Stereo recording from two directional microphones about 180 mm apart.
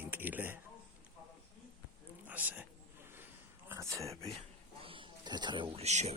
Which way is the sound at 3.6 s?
15° right (ahead or behind).